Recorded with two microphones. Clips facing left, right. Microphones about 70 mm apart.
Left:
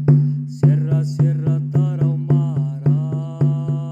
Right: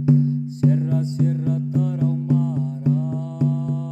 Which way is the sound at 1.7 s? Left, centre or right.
Left.